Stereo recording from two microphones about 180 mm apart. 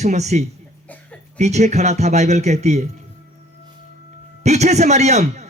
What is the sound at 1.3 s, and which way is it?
Speech, 40° right (ahead or behind).